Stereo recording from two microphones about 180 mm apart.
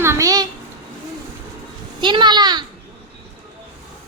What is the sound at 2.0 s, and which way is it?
Speech, 25° right (ahead or behind).